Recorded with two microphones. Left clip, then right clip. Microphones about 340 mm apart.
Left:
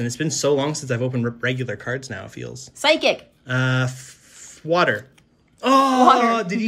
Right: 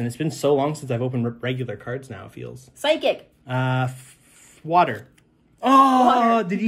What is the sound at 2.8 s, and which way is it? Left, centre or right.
Speech, left.